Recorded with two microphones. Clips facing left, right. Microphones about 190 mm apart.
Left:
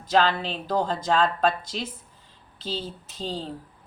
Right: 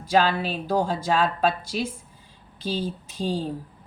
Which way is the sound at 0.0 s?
10° right (ahead or behind).